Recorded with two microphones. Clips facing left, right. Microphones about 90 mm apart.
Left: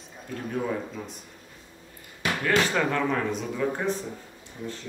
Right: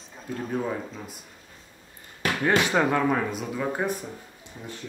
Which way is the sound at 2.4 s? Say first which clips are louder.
Right 2 dB; 20° right (ahead or behind).